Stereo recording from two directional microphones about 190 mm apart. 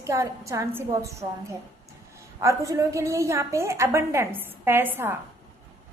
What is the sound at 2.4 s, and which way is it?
A woman's voice, 15° right (ahead or behind).